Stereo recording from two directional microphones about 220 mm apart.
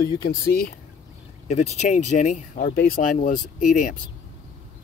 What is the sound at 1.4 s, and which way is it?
Speech, 30° left (ahead or behind).